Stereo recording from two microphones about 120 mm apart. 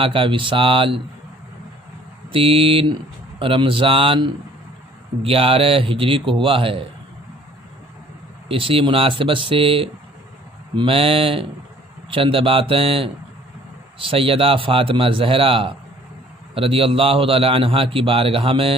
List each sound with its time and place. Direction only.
0.0 s a man's voice: 45° right (ahead or behind)
2.3 s a man's voice: 50° right (ahead or behind)
8.4 s a man's voice: 50° right (ahead or behind)